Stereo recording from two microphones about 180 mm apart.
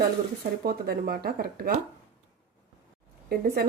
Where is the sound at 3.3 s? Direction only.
60° right (ahead or behind).